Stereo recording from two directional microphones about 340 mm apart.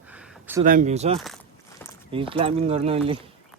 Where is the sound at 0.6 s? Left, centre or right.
Right.